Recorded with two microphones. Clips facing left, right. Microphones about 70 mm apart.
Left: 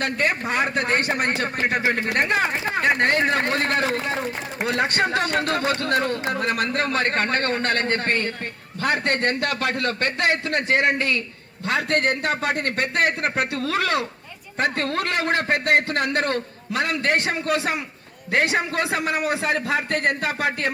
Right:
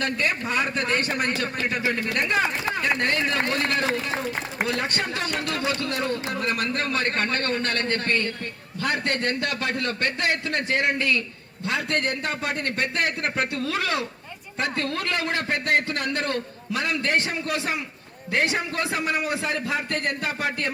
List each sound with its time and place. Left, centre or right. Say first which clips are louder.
0.0 s a man's voice: left 2 dB; left
1.3 s speech: left 2 dB; left
2.1 s a man's voice: left 2 dB; left
13.0 s a man's voice: left 7 dB; left
13.5 s a man's voice: left 3 dB; left